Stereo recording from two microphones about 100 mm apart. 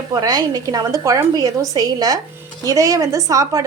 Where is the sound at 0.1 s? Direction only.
40° right (ahead or behind).